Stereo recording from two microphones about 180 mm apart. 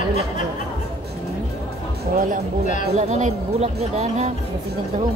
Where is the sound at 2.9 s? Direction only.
40° right (ahead or behind).